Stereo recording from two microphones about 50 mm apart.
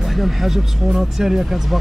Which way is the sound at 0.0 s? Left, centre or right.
Centre.